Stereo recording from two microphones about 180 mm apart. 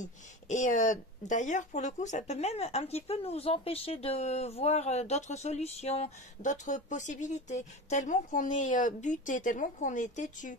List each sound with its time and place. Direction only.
0.0 s speech: 45° left (ahead or behind)